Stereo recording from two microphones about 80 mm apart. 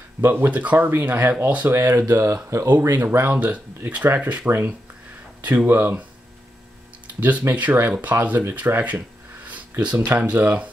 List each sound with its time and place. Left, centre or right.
0.2 s speech: right
2.3 s speech: right
3.0 s speech: right
7.2 s speech: centre
9.5 s a sound: centre
10.0 s speech: centre